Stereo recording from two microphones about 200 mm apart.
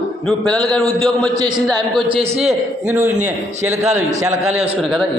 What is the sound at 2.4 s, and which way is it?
A man's voice, 10° right (ahead or behind).